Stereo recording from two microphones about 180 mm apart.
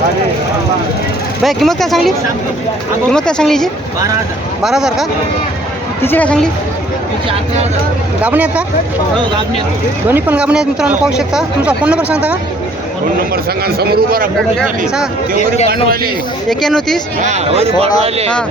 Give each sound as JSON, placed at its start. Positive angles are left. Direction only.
{"t": 1.5, "sound": "speech", "side_deg": 0}
{"t": 6.0, "sound": "speech", "side_deg": 10}
{"t": 8.2, "sound": "speech", "side_deg": -10}
{"t": 10.1, "sound": "speech", "side_deg": -10}
{"t": 13.1, "sound": "a man's voice", "side_deg": -60}
{"t": 15.4, "sound": "a man's voice", "side_deg": 40}
{"t": 16.5, "sound": "speech", "side_deg": 0}
{"t": 17.2, "sound": "speech", "side_deg": -35}